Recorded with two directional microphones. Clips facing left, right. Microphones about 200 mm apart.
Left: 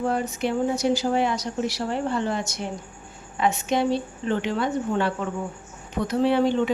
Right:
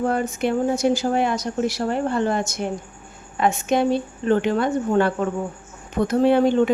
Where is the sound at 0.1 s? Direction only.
50° right (ahead or behind).